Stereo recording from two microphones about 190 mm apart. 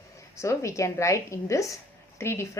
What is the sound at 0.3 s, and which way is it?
Speech, 15° left (ahead or behind).